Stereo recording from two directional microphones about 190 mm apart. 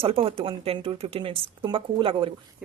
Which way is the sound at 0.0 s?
30° right (ahead or behind).